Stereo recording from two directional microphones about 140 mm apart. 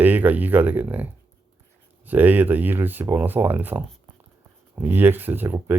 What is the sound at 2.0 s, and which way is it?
Speech, 10° right (ahead or behind).